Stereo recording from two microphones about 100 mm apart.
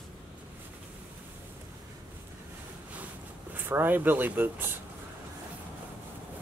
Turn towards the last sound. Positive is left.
turn(degrees=-20)  # may be behind; listen again after turning